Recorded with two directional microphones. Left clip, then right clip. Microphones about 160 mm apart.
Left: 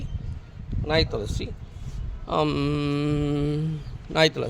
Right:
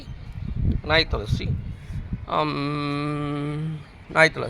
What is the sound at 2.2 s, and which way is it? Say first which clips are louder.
Mantra: even; 45° left (ahead or behind).